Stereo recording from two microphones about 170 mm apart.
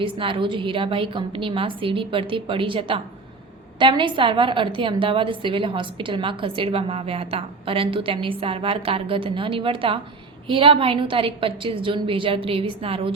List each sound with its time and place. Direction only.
0.0 s a woman's voice: 30° right (ahead or behind)